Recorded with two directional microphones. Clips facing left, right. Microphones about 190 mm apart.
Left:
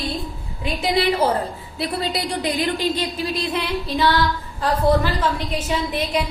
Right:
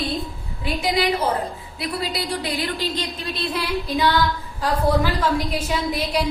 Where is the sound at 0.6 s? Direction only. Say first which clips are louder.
Left 1 dB; 30° left (ahead or behind).